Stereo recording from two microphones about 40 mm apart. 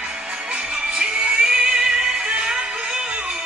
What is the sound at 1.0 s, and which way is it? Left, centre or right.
Music, right.